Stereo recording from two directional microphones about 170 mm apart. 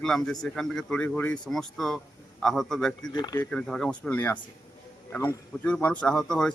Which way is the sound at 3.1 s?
25° left (ahead or behind).